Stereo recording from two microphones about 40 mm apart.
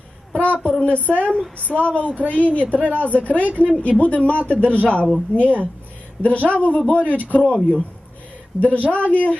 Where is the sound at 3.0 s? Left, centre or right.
Left.